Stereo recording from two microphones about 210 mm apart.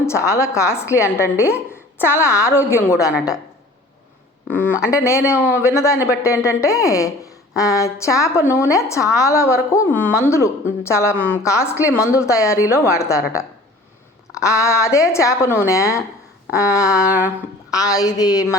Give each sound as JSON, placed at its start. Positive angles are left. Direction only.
{"t": 0.0, "sound": "a woman's voice", "side_deg": 15}
{"t": 4.9, "sound": "a woman's voice", "side_deg": 15}
{"t": 5.4, "sound": "a man's voice", "side_deg": -10}
{"t": 5.6, "sound": "a woman's voice", "side_deg": 15}
{"t": 17.1, "sound": "a sound", "side_deg": -10}
{"t": 17.7, "sound": "a woman's voice", "side_deg": 15}